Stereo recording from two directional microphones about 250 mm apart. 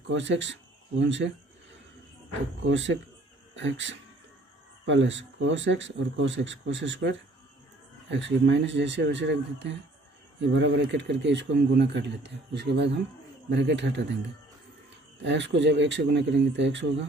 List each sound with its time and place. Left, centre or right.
0.1 s speech: right
2.7 s speech: right
15.2 s speech: right